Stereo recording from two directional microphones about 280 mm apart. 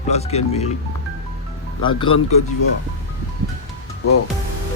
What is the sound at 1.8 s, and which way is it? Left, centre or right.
Speech, centre.